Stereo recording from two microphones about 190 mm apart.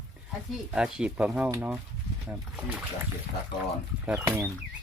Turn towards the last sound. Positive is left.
turn(degrees=-10)  # may be behind; listen again after turning